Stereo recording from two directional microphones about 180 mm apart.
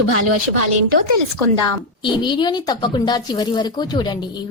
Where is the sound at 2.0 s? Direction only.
25° left (ahead or behind).